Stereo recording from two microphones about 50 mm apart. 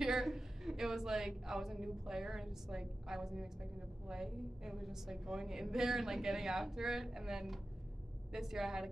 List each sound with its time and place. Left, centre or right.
0.0 s a woman's voice: centre